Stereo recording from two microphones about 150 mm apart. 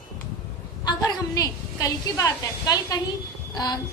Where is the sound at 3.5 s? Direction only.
25° left (ahead or behind).